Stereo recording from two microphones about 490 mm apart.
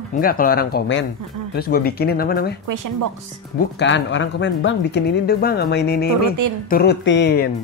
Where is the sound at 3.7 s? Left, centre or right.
Left.